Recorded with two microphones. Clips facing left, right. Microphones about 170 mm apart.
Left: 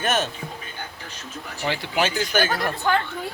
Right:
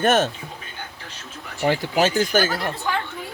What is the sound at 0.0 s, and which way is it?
Speech, 50° right (ahead or behind).